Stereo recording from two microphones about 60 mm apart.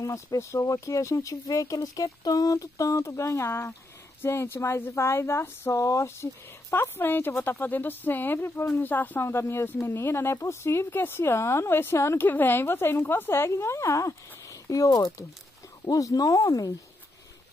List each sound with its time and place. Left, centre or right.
0.0 s speech: left
6.7 s a woman's voice: left
9.2 s speech: left
12.3 s speech: left
16.4 s speech: left